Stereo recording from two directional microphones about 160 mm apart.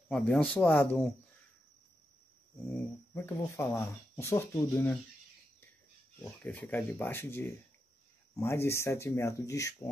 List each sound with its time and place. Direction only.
0.1 s speech: 5° left (ahead or behind)
2.7 s speech: 15° left (ahead or behind)
6.2 s speech: 10° left (ahead or behind)